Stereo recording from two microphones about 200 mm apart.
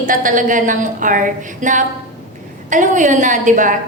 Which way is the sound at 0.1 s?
40° right (ahead or behind).